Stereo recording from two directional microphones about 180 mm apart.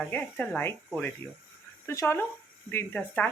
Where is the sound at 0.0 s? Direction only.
10° left (ahead or behind).